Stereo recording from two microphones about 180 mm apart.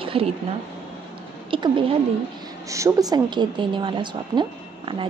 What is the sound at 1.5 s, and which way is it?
Speech, 30° right (ahead or behind).